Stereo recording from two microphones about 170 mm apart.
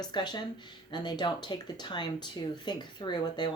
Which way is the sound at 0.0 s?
25° left (ahead or behind).